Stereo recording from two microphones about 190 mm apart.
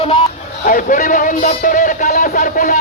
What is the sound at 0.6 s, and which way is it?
Speech, 45° left (ahead or behind).